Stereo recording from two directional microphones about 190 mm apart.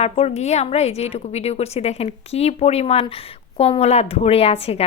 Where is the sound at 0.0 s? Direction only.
35° left (ahead or behind).